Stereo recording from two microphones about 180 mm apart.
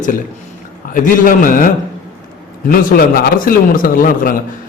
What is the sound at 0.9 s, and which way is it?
A man's voice, 50° left (ahead or behind).